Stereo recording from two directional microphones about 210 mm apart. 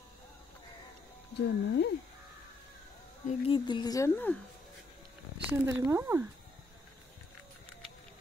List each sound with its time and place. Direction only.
1.3 s speech: 55° left (ahead or behind)
3.3 s speech: 25° left (ahead or behind)
5.5 s speech: 15° right (ahead or behind)